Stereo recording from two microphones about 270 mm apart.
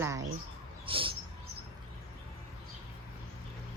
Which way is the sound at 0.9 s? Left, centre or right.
Centre.